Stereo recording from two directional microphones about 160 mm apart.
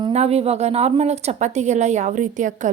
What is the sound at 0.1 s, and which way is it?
A woman's voice, 40° right (ahead or behind).